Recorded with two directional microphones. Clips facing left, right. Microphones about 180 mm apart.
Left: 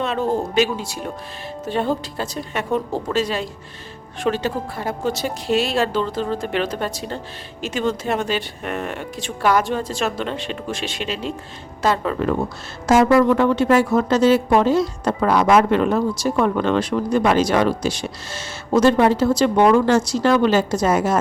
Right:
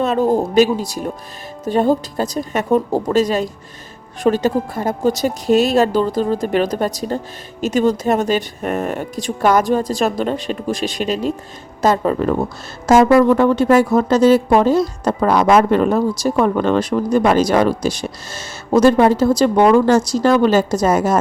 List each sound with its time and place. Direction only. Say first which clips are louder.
0.0 s speech: right 6 dB; 40° right (ahead or behind)